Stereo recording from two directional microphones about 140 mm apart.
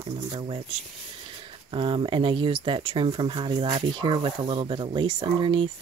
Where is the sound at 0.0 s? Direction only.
40° right (ahead or behind).